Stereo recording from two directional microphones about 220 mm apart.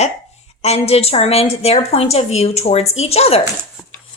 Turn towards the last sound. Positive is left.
turn(degrees=25)  # may be behind; listen again after turning